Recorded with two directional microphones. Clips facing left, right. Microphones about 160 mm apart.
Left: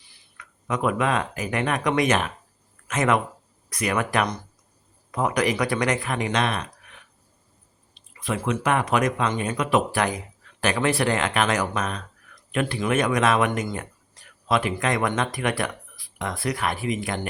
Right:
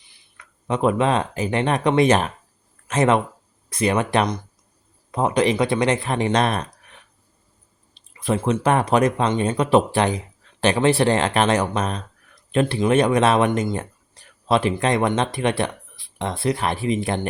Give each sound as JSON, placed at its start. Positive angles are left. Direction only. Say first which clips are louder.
{"t": 0.3, "sound": "speech", "louder": "right 4 dB", "side_deg": -30}